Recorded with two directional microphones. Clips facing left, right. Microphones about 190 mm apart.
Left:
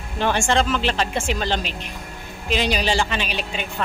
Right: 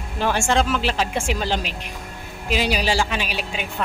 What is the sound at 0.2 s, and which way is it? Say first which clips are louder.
Speech: even; 5° right (ahead or behind).